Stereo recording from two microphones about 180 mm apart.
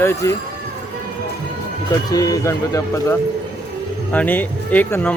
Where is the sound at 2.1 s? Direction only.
20° left (ahead or behind).